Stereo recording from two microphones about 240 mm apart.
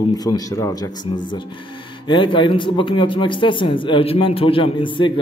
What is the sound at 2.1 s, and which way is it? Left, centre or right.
Speech, centre.